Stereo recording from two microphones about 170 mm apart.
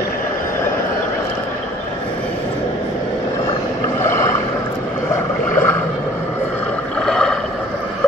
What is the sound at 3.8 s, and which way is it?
Boat, 15° left (ahead or behind).